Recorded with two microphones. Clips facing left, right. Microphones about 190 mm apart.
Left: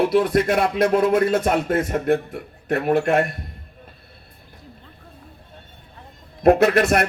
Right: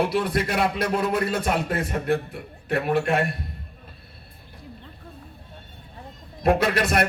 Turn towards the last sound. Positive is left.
turn(degrees=50)  # may be behind; listen again after turning